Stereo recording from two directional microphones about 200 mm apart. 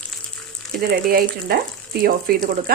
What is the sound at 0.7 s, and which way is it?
Speech, 50° right (ahead or behind).